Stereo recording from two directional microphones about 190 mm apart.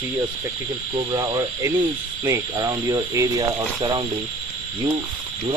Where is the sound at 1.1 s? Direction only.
20° right (ahead or behind).